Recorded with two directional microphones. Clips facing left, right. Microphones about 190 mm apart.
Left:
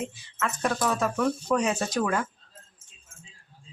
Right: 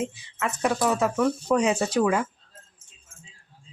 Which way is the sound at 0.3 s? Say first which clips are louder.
Right 3 dB; 15° right (ahead or behind).